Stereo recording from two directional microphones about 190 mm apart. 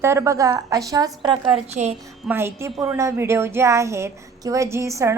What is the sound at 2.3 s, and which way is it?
A woman's voice, 10° right (ahead or behind).